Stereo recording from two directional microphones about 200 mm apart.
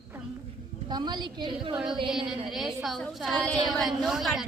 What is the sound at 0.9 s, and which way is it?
Speech, 20° right (ahead or behind).